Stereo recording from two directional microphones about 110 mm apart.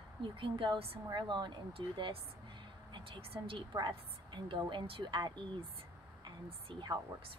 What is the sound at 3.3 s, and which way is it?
A woman's voice, 50° right (ahead or behind).